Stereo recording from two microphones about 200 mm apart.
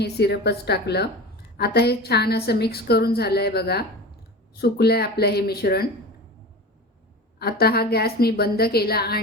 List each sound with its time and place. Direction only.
0.0 s a woman's voice: 55° left (ahead or behind)
7.3 s a woman's voice: 50° left (ahead or behind)